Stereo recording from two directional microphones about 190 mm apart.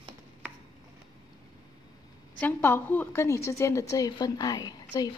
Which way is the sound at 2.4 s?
10° left (ahead or behind).